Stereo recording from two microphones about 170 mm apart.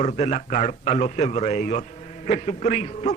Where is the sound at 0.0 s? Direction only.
45° left (ahead or behind).